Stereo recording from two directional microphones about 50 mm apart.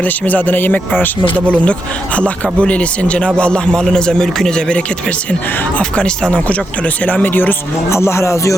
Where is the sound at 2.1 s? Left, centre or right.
Left.